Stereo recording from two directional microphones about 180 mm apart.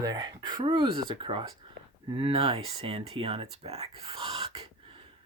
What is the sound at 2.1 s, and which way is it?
Speech, 30° right (ahead or behind).